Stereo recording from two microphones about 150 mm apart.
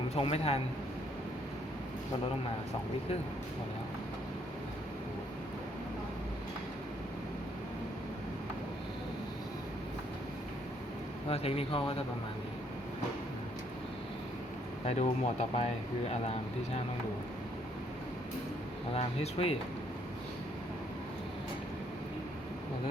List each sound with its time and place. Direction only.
0.1 s speech: 40° left (ahead or behind)
11.3 s speech: 40° left (ahead or behind)
14.8 s speech: 50° left (ahead or behind)
18.9 s speech: 45° left (ahead or behind)